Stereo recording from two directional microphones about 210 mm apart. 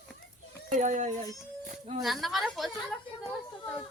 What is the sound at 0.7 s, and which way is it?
Speech, 35° right (ahead or behind).